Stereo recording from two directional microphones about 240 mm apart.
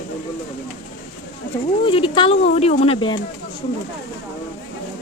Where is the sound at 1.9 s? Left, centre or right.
Left.